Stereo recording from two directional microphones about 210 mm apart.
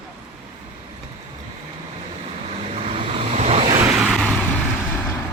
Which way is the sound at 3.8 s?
5° right (ahead or behind).